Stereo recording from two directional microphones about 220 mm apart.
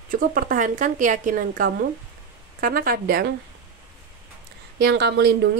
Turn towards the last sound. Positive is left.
turn(degrees=-50)  # may be behind; listen again after turning